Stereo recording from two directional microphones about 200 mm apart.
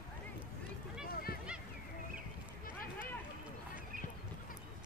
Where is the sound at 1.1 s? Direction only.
50° left (ahead or behind).